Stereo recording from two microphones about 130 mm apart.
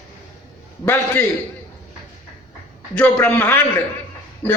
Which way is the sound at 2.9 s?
10° left (ahead or behind).